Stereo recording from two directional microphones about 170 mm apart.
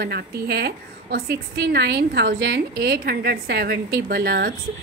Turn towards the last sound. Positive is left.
turn(degrees=-65)  # may be behind; listen again after turning